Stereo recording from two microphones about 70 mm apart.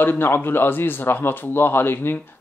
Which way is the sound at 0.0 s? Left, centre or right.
Left.